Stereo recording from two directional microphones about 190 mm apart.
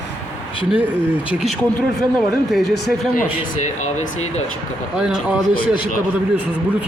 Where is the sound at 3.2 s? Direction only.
40° left (ahead or behind).